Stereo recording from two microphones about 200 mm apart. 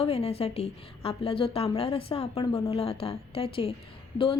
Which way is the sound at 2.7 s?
30° left (ahead or behind).